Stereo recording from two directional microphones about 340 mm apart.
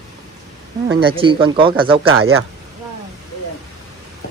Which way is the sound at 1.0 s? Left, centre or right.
Centre.